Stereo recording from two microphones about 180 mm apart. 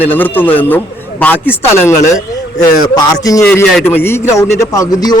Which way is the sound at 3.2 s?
15° left (ahead or behind).